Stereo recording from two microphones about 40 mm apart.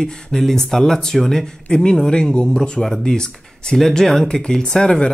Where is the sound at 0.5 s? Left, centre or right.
Centre.